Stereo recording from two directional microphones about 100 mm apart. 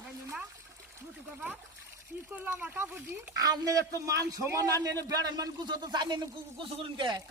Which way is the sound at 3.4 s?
40° right (ahead or behind).